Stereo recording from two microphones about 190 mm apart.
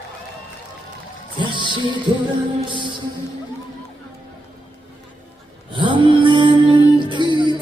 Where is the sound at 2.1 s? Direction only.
25° right (ahead or behind).